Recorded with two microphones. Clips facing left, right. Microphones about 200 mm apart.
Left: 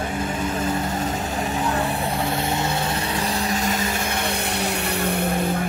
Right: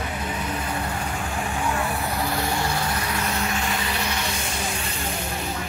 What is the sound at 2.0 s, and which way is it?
Vehicle, 25° left (ahead or behind).